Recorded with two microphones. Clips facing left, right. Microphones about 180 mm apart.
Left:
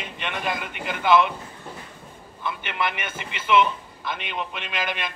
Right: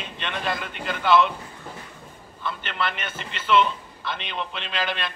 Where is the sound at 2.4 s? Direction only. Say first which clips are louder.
Left 1 dB; 15° left (ahead or behind).